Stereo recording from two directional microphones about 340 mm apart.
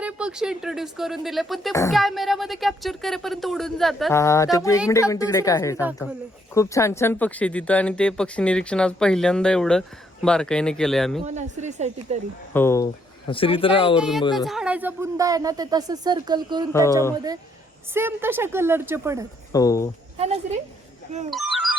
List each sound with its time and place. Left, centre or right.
0.0 s speech: centre
11.3 s a woman's voice: centre
12.5 s speech: centre
14.0 s speech: centre
17.9 s speech: centre
19.5 s speech: centre
20.1 s speech: centre
21.2 s a sound: centre